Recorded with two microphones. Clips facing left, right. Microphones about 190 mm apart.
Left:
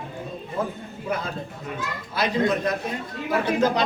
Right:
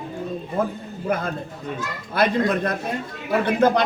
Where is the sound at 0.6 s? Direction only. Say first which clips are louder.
Right 4 dB; 55° right (ahead or behind).